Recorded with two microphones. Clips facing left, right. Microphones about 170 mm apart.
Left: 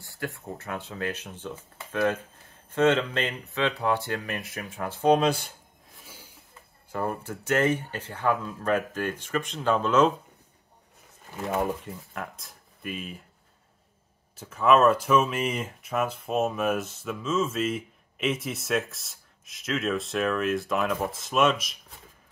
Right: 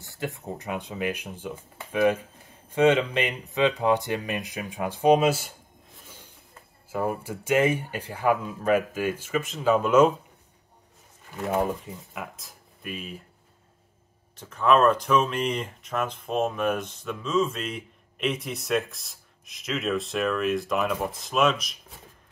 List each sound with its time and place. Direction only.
0.0 s speech: 20° right (ahead or behind)
6.9 s speech: 5° right (ahead or behind)
11.8 s speech: 5° right (ahead or behind)
14.3 s speech: 5° left (ahead or behind)